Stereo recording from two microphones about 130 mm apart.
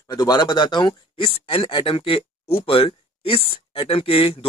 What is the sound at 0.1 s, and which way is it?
Speech, 30° left (ahead or behind).